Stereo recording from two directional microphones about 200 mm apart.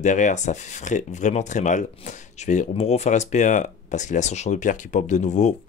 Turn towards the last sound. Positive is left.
turn(degrees=35)  # may be behind; listen again after turning